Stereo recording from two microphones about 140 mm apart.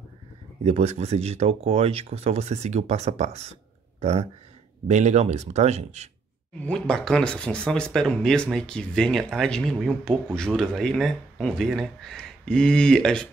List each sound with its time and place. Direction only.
0.7 s speech: 50° right (ahead or behind)
6.6 s speech: 5° left (ahead or behind)